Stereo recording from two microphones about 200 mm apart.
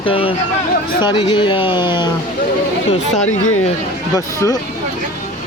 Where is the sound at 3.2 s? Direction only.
90° left.